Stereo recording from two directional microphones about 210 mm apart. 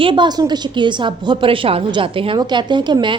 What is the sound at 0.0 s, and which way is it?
A woman's voice, 25° right (ahead or behind).